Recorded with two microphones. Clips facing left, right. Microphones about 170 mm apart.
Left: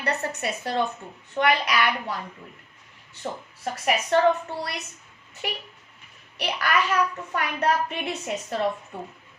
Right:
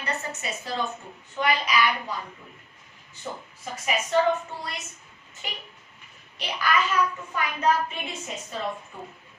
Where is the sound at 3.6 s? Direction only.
65° left (ahead or behind).